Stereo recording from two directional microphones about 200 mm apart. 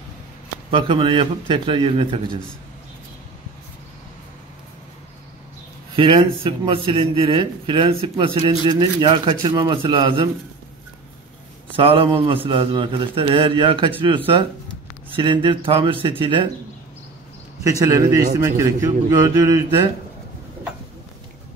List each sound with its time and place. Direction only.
0.7 s a man's voice: 25° right (ahead or behind)
5.9 s a man's voice: 25° right (ahead or behind)
11.7 s a man's voice: 25° right (ahead or behind)
17.6 s a man's voice: 15° right (ahead or behind)